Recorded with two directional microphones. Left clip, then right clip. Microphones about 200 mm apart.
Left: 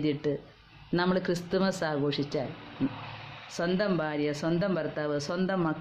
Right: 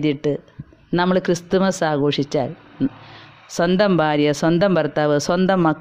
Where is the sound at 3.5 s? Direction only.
45° right (ahead or behind).